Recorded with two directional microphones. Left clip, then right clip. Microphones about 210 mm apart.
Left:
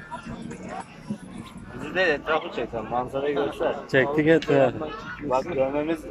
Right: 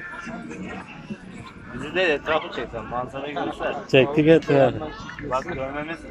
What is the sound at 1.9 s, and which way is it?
Speech, centre (ahead or behind).